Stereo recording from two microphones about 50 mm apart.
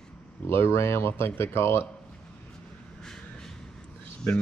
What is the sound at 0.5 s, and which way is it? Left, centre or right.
Speech, left.